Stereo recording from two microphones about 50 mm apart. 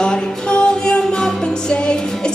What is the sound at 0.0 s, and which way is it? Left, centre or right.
Music, centre.